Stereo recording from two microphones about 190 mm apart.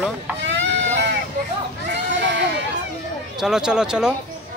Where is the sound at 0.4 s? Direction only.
70° right (ahead or behind).